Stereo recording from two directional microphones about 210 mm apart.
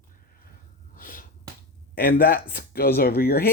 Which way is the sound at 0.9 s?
40° left (ahead or behind).